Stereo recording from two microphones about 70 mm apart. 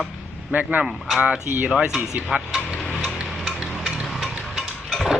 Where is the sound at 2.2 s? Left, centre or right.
Centre.